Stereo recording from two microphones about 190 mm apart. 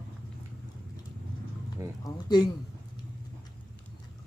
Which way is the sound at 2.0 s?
20° left (ahead or behind).